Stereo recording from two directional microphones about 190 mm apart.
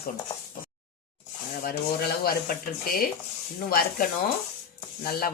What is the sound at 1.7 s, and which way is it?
Speech, 50° left (ahead or behind).